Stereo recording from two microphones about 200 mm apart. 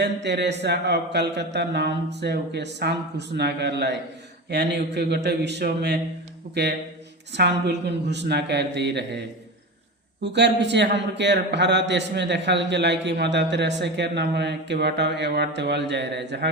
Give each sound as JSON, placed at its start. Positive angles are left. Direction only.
{"t": 0.0, "sound": "a man's voice", "side_deg": -55}
{"t": 10.3, "sound": "a man's voice", "side_deg": -60}